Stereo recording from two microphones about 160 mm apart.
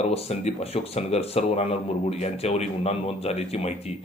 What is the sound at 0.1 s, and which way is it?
Speech, 40° left (ahead or behind).